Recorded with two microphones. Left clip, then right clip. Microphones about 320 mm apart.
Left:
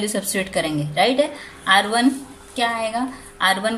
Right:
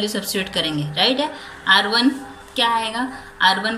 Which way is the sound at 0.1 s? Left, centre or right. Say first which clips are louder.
Even; centre.